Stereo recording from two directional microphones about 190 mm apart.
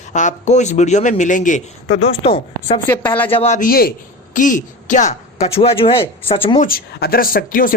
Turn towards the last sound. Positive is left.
turn(degrees=50)  # may be behind; listen again after turning